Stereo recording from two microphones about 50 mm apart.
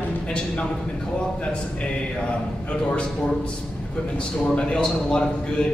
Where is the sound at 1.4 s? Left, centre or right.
Left.